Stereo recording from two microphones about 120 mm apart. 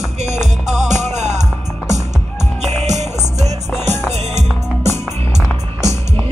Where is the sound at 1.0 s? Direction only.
70° right (ahead or behind).